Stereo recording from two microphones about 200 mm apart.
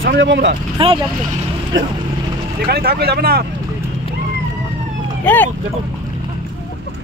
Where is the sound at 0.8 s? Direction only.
25° right (ahead or behind).